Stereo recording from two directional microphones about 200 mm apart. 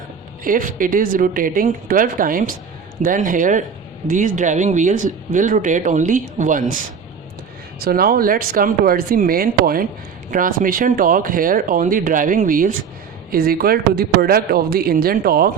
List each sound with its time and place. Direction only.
0.4 s speech: 45° right (ahead or behind)
7.8 s speech: 50° right (ahead or behind)